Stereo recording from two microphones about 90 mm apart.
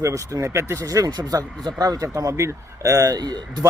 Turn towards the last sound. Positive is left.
turn(degrees=-50)  # may be behind; listen again after turning